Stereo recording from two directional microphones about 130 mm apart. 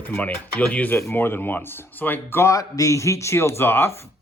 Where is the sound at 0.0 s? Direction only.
15° left (ahead or behind).